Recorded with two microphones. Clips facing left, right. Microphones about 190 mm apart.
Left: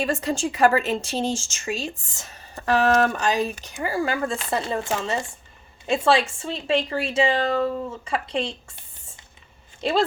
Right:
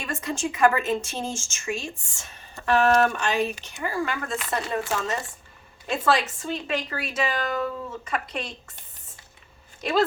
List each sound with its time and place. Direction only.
0.0 s speech: 35° left (ahead or behind)
9.8 s speech: 30° left (ahead or behind)